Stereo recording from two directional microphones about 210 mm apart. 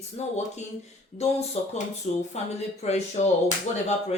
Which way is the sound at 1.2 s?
30° left (ahead or behind).